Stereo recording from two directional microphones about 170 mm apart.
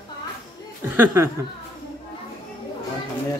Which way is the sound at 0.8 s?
10° right (ahead or behind).